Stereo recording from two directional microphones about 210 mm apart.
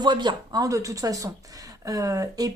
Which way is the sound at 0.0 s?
20° right (ahead or behind).